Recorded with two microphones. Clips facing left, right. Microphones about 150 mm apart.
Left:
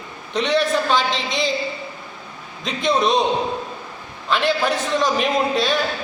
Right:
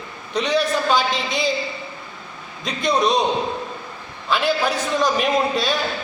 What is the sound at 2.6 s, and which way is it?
Speech, centre (ahead or behind).